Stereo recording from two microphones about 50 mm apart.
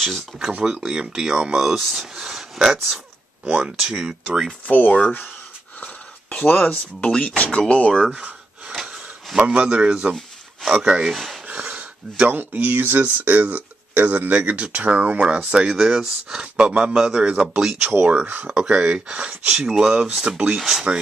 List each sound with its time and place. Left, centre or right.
0.0 s speech: centre
0.7 s speech: centre
4.6 s speech: left
6.3 s speech: left
8.1 s gasp: right
9.5 s speech: right
11.4 s a sound: right
12.3 s speech: right
13.0 s speech: right
18.2 s speech: right
18.5 s speech: centre
20.2 s speech: right
20.5 s speech: centre